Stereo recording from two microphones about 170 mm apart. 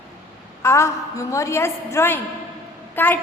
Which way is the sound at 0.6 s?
15° left (ahead or behind).